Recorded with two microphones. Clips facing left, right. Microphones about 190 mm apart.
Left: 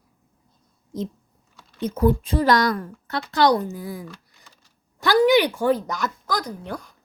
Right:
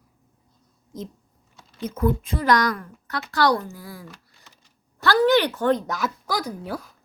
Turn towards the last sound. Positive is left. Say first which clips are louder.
# right 1 dB
turn(degrees=-5)  # may be behind; listen again after turning